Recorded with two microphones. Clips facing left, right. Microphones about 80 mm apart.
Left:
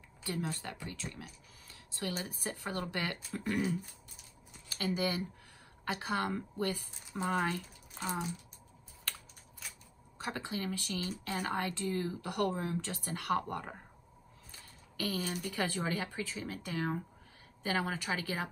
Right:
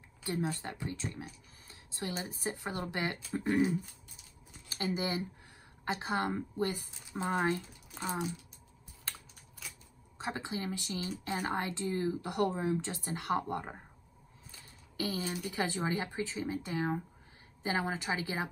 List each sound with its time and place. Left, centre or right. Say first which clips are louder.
0.2 s speech: right 3 dB; right
4.7 s speech: even; right
10.1 s speech: right 1 dB; right
15.0 s speech: right 1 dB; centre